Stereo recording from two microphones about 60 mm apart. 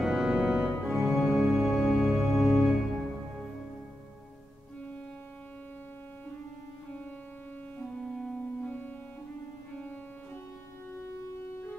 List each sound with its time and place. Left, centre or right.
0.0 s organ: centre
0.7 s organ: centre
1.7 s music: centre
7.8 s music: centre